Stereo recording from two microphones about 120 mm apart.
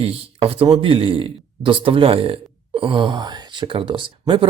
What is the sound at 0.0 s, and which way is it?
Speech, 50° right (ahead or behind).